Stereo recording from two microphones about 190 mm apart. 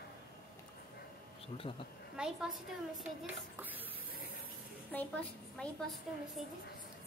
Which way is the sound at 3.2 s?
10° right (ahead or behind).